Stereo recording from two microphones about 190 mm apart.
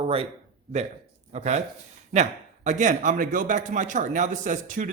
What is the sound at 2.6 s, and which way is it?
A man's voice, 40° right (ahead or behind).